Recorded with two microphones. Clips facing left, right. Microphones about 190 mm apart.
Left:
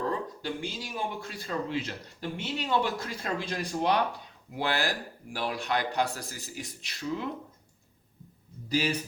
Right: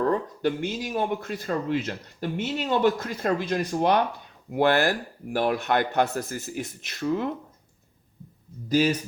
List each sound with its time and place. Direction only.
0.0 s speech: 55° right (ahead or behind)